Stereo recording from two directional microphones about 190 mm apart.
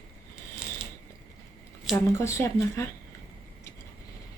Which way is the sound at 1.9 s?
15° left (ahead or behind).